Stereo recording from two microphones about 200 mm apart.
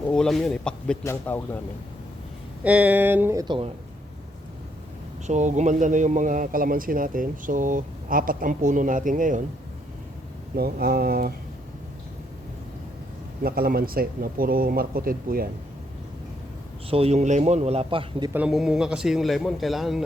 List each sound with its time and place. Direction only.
0.1 s a man's voice: 5° left (ahead or behind)
2.6 s speech: 5° right (ahead or behind); by 3.7 s 25° right (ahead or behind)
5.2 s a man's voice: 35° right (ahead or behind)
10.6 s speech: 50° right (ahead or behind)
13.4 s speech: 50° right (ahead or behind)
16.9 s a man's voice: 30° right (ahead or behind)
18.3 s a man's voice: 5° right (ahead or behind)